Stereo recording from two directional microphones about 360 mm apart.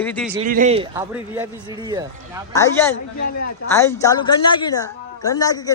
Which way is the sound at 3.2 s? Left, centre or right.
Left.